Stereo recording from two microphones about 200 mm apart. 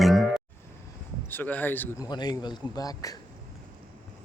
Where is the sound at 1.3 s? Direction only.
10° left (ahead or behind).